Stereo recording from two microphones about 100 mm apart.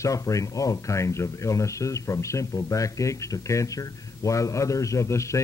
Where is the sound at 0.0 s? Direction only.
30° left (ahead or behind).